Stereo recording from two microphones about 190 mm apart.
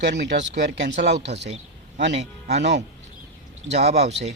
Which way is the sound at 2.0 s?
65° right (ahead or behind).